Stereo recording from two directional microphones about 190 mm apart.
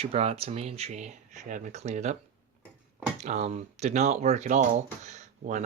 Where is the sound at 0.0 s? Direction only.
30° right (ahead or behind).